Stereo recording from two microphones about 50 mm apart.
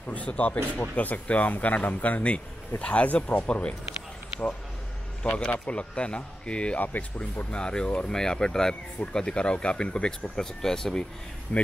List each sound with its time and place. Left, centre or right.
0.1 s speech: left
5.2 s speech: left
6.8 s speech: left